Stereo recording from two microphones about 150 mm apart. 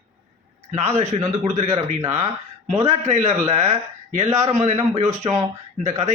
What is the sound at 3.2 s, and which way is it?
A man's voice, 45° right (ahead or behind).